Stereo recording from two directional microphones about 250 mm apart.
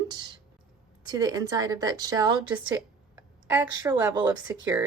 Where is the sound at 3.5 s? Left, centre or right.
Centre.